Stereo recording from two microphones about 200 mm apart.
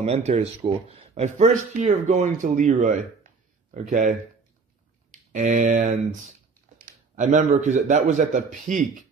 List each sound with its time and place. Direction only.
0.0 s speech: 30° right (ahead or behind)
5.3 s speech: 40° right (ahead or behind)